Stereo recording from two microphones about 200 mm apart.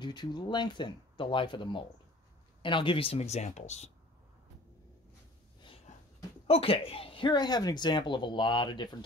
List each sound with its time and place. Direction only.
0.0 s speech: 20° left (ahead or behind)
6.4 s speech: 30° left (ahead or behind)